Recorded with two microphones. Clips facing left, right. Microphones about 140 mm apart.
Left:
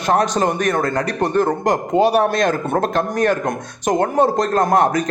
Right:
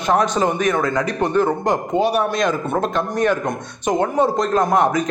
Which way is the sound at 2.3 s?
50° left (ahead or behind).